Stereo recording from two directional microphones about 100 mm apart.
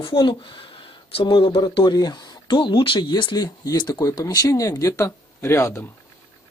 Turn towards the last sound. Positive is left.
turn(degrees=30)  # may be behind; listen again after turning